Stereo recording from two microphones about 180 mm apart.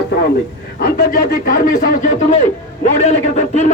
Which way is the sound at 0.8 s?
55° left (ahead or behind).